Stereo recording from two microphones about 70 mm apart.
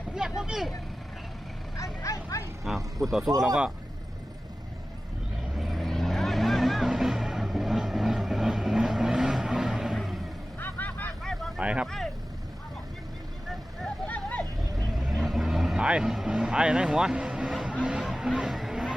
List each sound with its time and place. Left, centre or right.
0.1 s vehicle: centre
1.7 s speech: left
2.6 s speech: centre
5.5 s vehicle: centre
10.6 s vehicle: left
11.2 s vehicle: centre
11.6 s speech: centre
14.1 s vehicle: left
14.9 s vehicle: centre
18.0 s music: centre